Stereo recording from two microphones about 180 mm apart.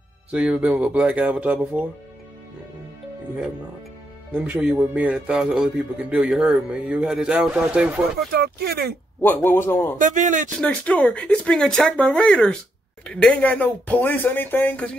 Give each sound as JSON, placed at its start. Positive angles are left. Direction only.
{"t": 0.3, "sound": "speech", "side_deg": -5}
{"t": 4.3, "sound": "a man's voice", "side_deg": -5}
{"t": 8.3, "sound": "speech", "side_deg": -60}
{"t": 9.2, "sound": "speech", "side_deg": 10}
{"t": 9.9, "sound": "speech", "side_deg": -45}
{"t": 10.5, "sound": "a man's voice", "side_deg": 5}